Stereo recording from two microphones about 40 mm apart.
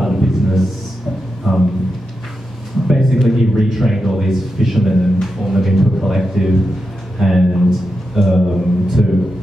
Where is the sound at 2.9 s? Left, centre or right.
Centre.